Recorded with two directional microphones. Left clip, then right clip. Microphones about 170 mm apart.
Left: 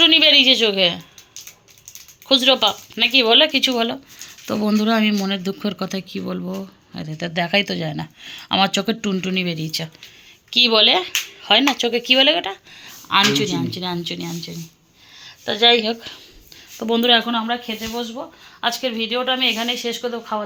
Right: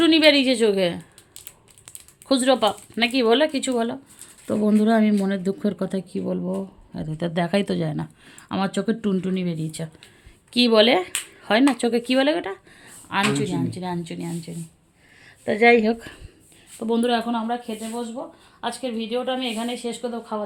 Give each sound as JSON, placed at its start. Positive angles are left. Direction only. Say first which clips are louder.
{"t": 0.0, "sound": "a woman's voice", "louder": "left 4 dB", "side_deg": -30}
{"t": 2.2, "sound": "speech", "louder": "left 4 dB", "side_deg": -30}
{"t": 4.4, "sound": "speech", "louder": "even", "side_deg": 0}
{"t": 4.8, "sound": "speech", "louder": "left 2 dB", "side_deg": -10}
{"t": 7.2, "sound": "speech", "louder": "left 4 dB", "side_deg": -25}
{"t": 10.5, "sound": "speech", "louder": "left 3 dB", "side_deg": -30}
{"t": 13.1, "sound": "speech", "louder": "left 6 dB", "side_deg": -15}
{"t": 15.4, "sound": "speech", "louder": "left 1 dB", "side_deg": 10}
{"t": 15.8, "sound": "speech", "louder": "even", "side_deg": -45}
{"t": 16.8, "sound": "speech", "louder": "left 6 dB", "side_deg": 0}